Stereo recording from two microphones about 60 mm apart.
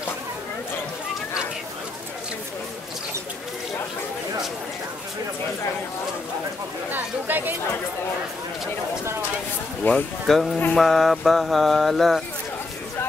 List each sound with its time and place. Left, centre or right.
6.9 s chatter: right
9.8 s speech: left
10.2 s mantra: centre